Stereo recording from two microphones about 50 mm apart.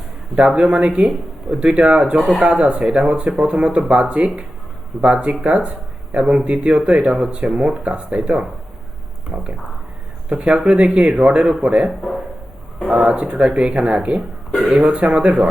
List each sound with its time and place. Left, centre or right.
0.3 s speech: right
12.9 s speech: right